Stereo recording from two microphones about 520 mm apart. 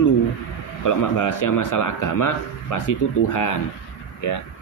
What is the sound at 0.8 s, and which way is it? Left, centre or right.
A man's voice, left.